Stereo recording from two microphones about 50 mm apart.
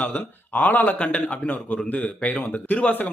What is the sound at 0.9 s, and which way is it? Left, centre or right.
Speech, left.